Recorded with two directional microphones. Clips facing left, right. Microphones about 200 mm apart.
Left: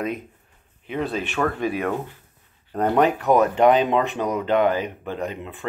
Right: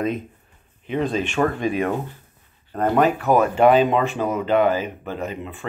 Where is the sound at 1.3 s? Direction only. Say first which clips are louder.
Right 2 dB; 15° right (ahead or behind).